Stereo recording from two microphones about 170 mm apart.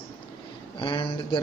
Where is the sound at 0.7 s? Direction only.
30° left (ahead or behind).